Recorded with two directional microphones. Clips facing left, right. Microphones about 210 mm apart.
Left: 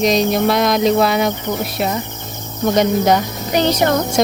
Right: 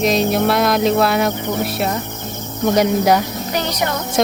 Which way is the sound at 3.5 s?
25° left (ahead or behind).